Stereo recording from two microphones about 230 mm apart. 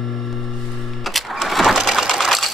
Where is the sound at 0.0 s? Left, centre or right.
Centre.